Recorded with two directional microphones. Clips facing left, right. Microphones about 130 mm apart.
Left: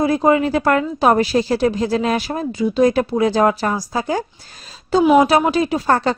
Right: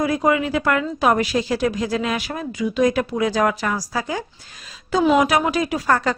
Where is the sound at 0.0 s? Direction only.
30° left (ahead or behind).